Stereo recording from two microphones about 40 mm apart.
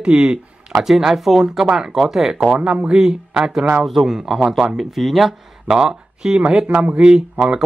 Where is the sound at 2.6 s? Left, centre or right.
Right; by 5.4 s centre.